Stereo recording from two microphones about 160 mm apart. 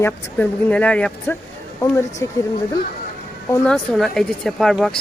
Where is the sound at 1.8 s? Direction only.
20° left (ahead or behind).